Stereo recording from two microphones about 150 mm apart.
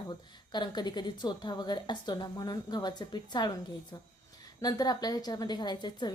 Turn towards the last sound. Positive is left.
turn(degrees=30)  # may be behind; listen again after turning